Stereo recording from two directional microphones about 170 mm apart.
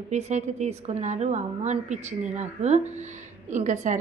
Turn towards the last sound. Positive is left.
turn(degrees=-45)  # may be behind; listen again after turning